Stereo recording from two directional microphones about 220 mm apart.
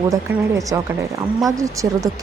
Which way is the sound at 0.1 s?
15° right (ahead or behind).